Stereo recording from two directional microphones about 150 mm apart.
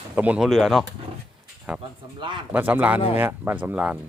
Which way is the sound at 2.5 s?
10° right (ahead or behind).